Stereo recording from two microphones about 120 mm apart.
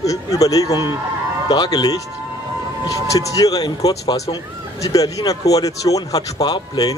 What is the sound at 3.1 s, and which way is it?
A man's voice, 30° left (ahead or behind).